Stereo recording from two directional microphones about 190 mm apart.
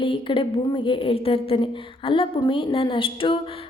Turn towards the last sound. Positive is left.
turn(degrees=25)  # may be behind; listen again after turning